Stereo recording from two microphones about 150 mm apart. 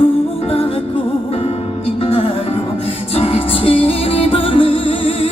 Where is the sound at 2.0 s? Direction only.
40° left (ahead or behind).